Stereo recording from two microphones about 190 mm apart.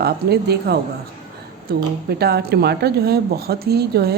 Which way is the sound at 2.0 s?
55° right (ahead or behind).